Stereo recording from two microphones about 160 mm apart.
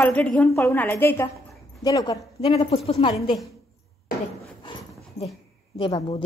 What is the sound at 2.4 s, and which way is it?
Speech, 35° left (ahead or behind).